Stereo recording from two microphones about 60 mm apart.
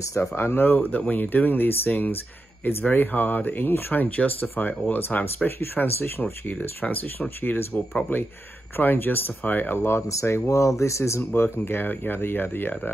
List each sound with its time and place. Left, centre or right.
0.1 s speech: left
5.6 s speech: left
10.0 s speech: left